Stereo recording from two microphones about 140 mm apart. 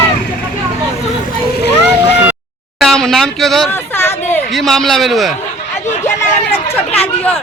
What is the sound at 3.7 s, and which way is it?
Speech, 15° left (ahead or behind).